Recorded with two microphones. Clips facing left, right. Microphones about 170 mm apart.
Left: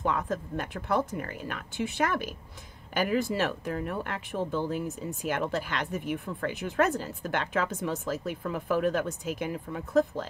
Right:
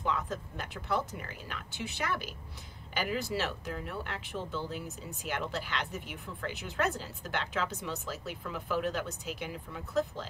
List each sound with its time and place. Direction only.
0.0 s speech: 50° left (ahead or behind)